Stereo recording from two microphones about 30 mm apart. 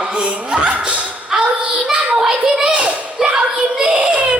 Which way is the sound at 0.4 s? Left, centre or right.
Right.